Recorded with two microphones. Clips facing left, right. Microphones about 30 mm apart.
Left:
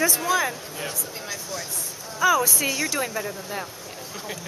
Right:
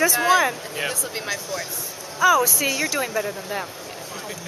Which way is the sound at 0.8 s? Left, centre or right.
Right.